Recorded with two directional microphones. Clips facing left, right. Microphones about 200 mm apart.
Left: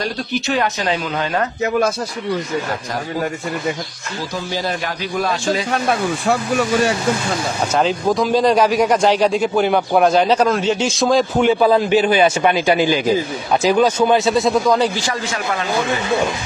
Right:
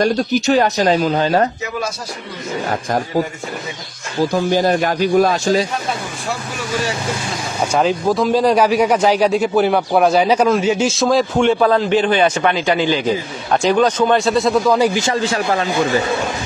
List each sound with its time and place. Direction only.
0.0 s speech: 45° right (ahead or behind)
4.3 s speech: 50° right (ahead or behind)
7.7 s speech: centre (ahead or behind)
15.0 s speech: 25° right (ahead or behind)